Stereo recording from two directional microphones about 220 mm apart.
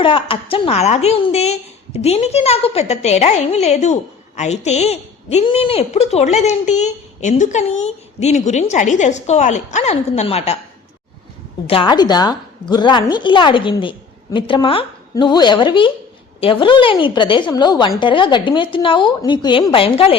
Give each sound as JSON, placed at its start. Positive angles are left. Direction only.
{"t": 0.0, "sound": "a woman's voice", "side_deg": 25}
{"t": 11.6, "sound": "a woman's voice", "side_deg": 25}